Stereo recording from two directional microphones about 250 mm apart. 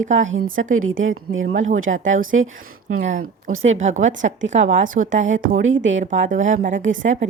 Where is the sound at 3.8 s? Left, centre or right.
Right.